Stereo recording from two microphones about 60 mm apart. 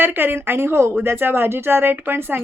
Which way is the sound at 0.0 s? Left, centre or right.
Right.